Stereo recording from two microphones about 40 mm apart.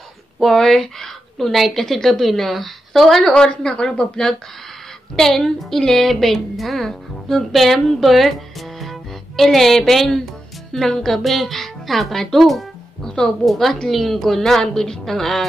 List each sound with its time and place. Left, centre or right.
0.4 s a woman's voice: centre
3.3 s speech: left
5.1 s a woman's voice: centre
8.0 s music: centre
9.4 s a woman's voice: centre
13.0 s speech: centre
13.5 s a woman's voice: centre